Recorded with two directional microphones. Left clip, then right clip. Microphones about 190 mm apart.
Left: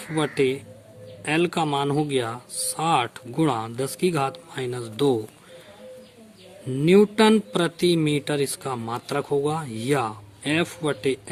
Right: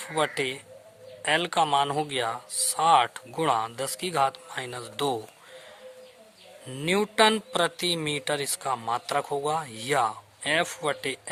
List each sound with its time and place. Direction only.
0.0 s a man's voice: 25° right (ahead or behind)
6.7 s a man's voice: 25° right (ahead or behind)